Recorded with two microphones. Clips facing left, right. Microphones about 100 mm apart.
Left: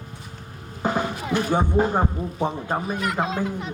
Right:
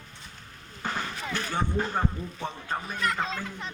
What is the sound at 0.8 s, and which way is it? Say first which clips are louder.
Vehicle: left 9 dB; 15° left (ahead or behind).